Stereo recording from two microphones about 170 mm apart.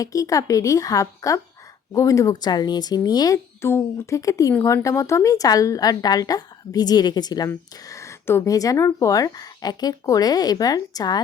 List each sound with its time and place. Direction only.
0.0 s speech: 20° left (ahead or behind)